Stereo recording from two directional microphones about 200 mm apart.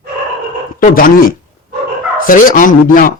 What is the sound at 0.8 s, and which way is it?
Speech, 45° left (ahead or behind).